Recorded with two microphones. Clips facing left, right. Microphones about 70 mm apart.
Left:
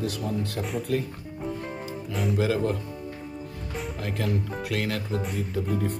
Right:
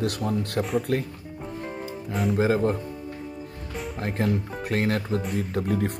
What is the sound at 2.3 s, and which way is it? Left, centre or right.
Speech, right.